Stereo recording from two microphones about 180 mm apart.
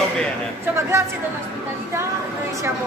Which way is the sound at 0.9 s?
15° right (ahead or behind).